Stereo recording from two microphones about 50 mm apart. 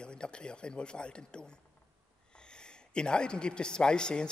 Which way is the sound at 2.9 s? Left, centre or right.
Centre.